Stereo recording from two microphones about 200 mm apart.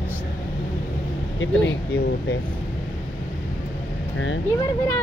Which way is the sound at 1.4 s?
65° left (ahead or behind).